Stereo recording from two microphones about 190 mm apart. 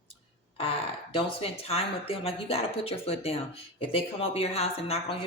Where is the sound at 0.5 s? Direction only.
30° left (ahead or behind).